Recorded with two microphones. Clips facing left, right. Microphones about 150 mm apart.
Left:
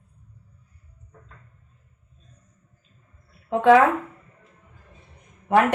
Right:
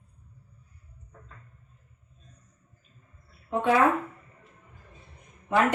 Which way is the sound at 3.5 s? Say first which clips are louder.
Left 9 dB; 90° left.